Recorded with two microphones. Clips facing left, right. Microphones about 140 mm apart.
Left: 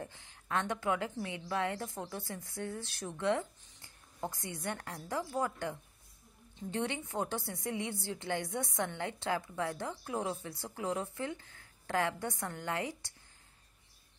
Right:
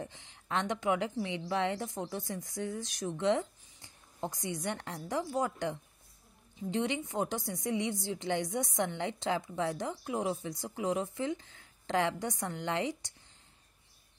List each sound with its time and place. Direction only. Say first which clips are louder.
0.0 s a woman's voice: right 2 dB; 20° right (ahead or behind)